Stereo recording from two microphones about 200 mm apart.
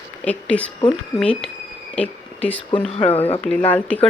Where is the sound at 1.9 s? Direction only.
5° left (ahead or behind).